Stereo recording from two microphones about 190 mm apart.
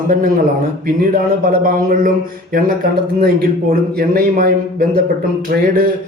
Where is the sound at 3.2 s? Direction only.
50° right (ahead or behind).